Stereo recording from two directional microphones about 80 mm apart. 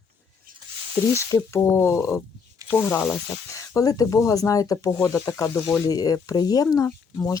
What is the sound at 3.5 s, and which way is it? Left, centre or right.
Speech, left.